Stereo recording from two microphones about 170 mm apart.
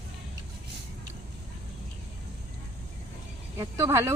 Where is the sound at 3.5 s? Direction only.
20° right (ahead or behind).